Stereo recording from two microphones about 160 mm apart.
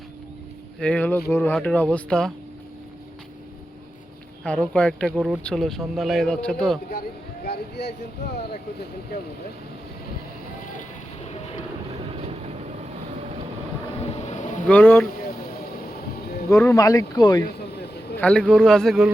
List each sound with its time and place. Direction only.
0.8 s speech: 10° left (ahead or behind)
4.4 s speech: 5° left (ahead or behind)
7.4 s speech: 90° left
12.1 s vehicle: 40° right (ahead or behind)
14.3 s vehicle: 50° left (ahead or behind)
14.7 s speech: 10° left (ahead or behind)
16.5 s speech: 20° left (ahead or behind)
18.2 s speech: 5° left (ahead or behind)